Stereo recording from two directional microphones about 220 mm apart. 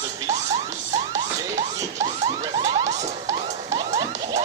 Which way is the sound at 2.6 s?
30° right (ahead or behind).